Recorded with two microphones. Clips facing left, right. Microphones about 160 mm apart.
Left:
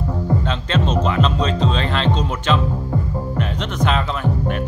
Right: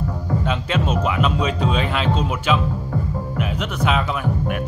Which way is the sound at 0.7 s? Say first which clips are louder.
Left 4 dB; 10° right (ahead or behind).